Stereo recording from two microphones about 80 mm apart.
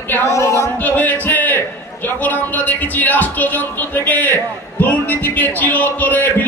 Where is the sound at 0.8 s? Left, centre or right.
Left.